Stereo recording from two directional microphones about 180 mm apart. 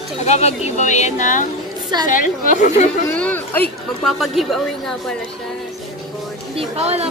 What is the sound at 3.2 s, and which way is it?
A woman's voice, 10° left (ahead or behind).